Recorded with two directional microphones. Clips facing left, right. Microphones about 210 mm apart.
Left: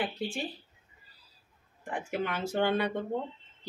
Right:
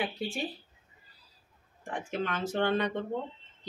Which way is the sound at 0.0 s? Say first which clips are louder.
Even; centre (ahead or behind).